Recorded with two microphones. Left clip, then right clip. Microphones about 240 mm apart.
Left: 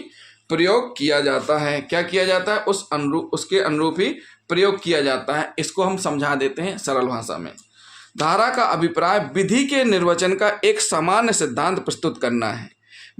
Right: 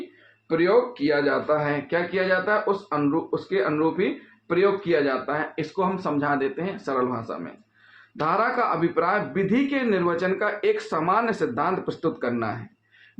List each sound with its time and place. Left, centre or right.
0.4 s speech: left